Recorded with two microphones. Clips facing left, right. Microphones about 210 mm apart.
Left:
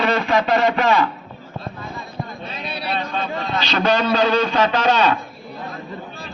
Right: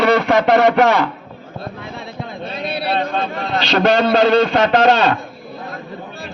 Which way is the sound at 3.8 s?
60° right (ahead or behind).